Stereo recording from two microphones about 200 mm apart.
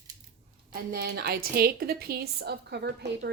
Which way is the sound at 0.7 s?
50° right (ahead or behind).